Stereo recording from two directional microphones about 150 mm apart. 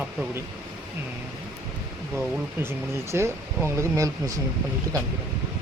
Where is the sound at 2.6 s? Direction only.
15° right (ahead or behind).